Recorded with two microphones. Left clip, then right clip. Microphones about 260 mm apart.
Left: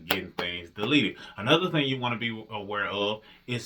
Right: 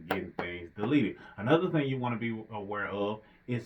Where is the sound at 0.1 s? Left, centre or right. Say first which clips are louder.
Left 5 dB; centre.